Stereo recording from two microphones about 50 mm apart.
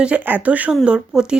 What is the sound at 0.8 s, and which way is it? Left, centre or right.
Speech, centre.